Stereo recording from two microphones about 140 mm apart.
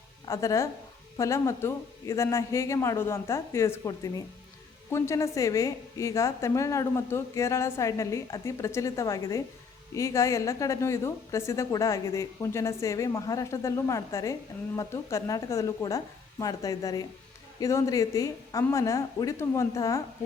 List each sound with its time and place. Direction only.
0.3 s a woman's voice: 20° left (ahead or behind)